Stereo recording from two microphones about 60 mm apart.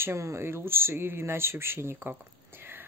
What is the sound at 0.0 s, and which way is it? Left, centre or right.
A woman's voice, right.